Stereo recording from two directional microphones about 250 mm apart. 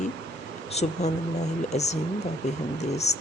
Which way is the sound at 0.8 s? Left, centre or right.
Left.